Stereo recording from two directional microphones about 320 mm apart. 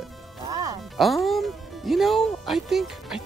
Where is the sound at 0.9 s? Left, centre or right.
Centre.